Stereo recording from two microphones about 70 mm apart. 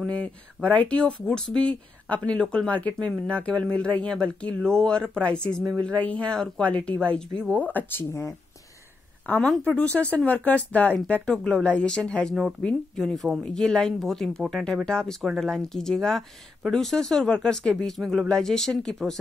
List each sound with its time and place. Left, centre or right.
0.1 s speech: centre
7.5 s speech: left
8.1 s speech: left
9.3 s a woman's voice: left
11.2 s speech: centre